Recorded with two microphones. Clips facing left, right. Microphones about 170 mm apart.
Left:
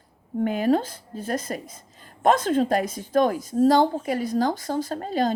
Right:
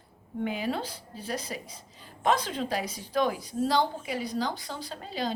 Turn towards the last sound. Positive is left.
turn(degrees=50)  # may be behind; listen again after turning